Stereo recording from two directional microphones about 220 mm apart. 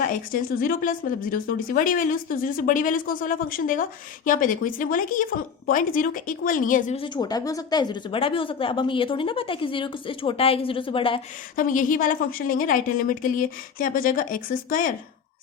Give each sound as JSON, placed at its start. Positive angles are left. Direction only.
{"t": 0.0, "sound": "speech", "side_deg": 40}
{"t": 7.0, "sound": "speech", "side_deg": 20}
{"t": 11.5, "sound": "speech", "side_deg": 35}